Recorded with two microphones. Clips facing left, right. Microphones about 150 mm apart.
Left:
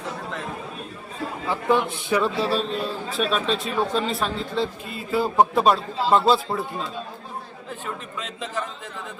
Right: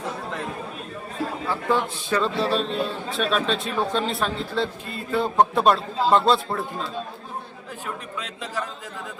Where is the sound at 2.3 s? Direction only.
Centre (ahead or behind).